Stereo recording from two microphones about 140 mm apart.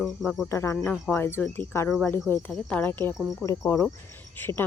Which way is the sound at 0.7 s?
10° left (ahead or behind).